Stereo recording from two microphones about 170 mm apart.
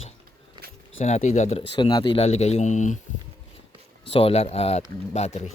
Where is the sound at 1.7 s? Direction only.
25° left (ahead or behind); by 3.0 s 45° left (ahead or behind).